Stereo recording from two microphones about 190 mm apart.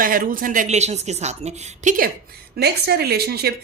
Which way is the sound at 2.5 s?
55° right (ahead or behind).